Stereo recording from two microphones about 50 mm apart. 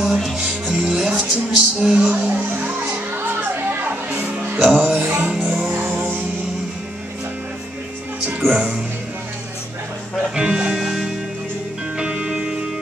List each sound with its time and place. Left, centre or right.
0.0 s music: centre
0.4 s music: centre
3.3 s music: right
4.6 s music: centre
4.8 s music: right
5.5 s music: centre
8.5 s music: right
10.3 s music: centre